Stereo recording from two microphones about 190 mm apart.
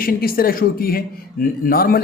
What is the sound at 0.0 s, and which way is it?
A man's voice, 50° left (ahead or behind).